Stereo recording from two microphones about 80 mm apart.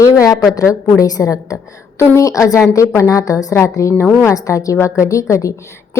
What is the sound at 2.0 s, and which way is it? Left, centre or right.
A woman's voice, left.